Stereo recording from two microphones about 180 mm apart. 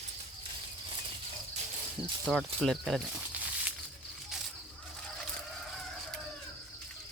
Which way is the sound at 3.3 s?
10° right (ahead or behind).